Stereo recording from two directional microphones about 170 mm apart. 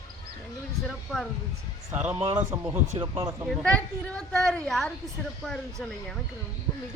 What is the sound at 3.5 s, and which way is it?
Speech, 5° left (ahead or behind).